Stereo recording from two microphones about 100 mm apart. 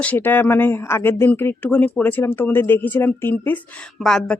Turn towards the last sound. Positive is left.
turn(degrees=5)  # may be behind; listen again after turning